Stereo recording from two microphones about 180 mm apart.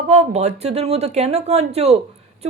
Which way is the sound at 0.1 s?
35° right (ahead or behind).